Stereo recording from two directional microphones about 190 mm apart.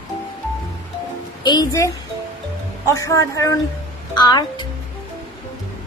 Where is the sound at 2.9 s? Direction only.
15° left (ahead or behind).